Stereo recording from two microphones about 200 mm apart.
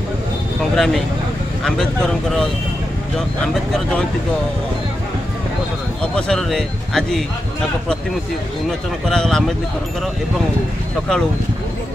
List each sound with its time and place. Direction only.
0.7 s a man's voice: centre (ahead or behind)
6.1 s a man's voice: 5° left (ahead or behind)
9.1 s a man's voice: 5° left (ahead or behind)